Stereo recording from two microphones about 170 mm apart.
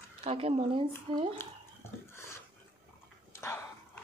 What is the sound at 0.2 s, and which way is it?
Speech, 35° right (ahead or behind).